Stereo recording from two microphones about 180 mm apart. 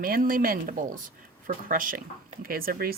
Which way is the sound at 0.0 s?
50° right (ahead or behind).